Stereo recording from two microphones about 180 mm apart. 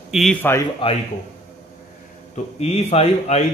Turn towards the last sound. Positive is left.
turn(degrees=35)  # may be behind; listen again after turning